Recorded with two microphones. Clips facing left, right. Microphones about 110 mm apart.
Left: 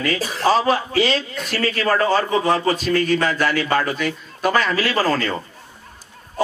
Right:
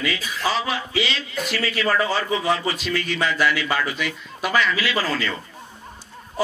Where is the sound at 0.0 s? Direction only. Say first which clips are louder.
Left 5 dB; 40° left (ahead or behind).